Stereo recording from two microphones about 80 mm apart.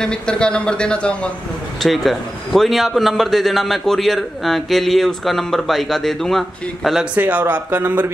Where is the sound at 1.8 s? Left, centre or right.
Centre.